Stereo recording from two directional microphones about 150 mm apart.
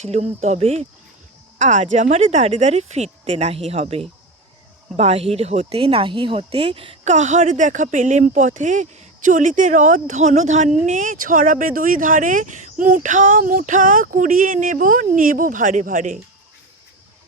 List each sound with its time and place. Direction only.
0.0 s speech: 45° right (ahead or behind)
7.1 s speech: 55° right (ahead or behind)